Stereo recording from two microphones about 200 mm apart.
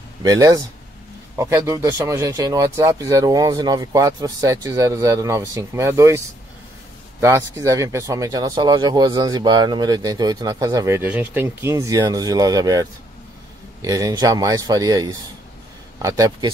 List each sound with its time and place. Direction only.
0.2 s speech: 20° right (ahead or behind)
13.8 s speech: 20° right (ahead or behind)